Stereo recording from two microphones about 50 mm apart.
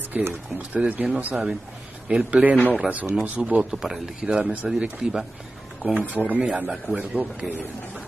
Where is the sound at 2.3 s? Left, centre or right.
Right.